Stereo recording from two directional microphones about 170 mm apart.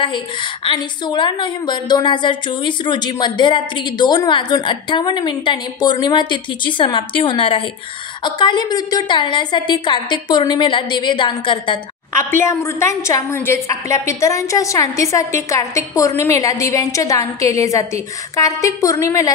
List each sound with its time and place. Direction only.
0.7 s a woman's voice: 30° left (ahead or behind)
12.1 s a woman's voice: 15° left (ahead or behind)